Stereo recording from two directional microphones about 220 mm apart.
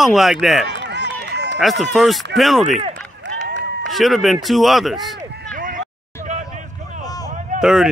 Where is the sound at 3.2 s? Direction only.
55° right (ahead or behind).